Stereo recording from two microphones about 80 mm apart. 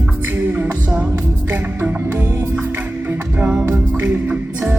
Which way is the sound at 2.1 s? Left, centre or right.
Right.